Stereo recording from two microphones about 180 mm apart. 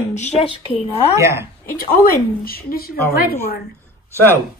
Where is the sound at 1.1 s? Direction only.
15° right (ahead or behind).